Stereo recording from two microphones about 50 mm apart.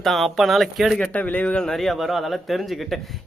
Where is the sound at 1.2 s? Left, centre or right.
Left.